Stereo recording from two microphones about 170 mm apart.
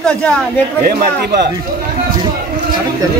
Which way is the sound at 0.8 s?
65° right (ahead or behind).